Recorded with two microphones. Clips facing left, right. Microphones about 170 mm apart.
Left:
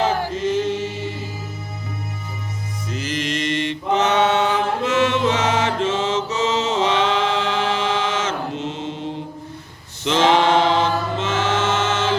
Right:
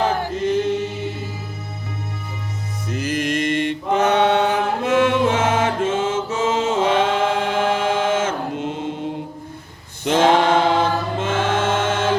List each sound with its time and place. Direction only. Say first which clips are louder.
0.0 s choir: even; 55° right (ahead or behind)
2.9 s mantra: right 3 dB; 55° right (ahead or behind)
10.0 s a sound: right 1 dB; 50° right (ahead or behind)
11.2 s choir: right 2 dB; 55° right (ahead or behind)